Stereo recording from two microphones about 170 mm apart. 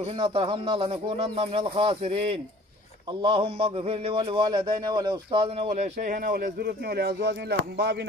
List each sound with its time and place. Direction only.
0.0 s a man's voice: 30° right (ahead or behind); by 8.0 s 75° right (ahead or behind)